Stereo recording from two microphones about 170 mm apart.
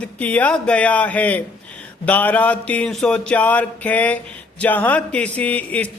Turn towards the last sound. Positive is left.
turn(degrees=10)  # may be behind; listen again after turning